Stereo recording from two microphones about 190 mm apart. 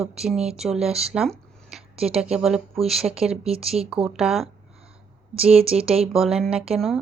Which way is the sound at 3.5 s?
30° right (ahead or behind).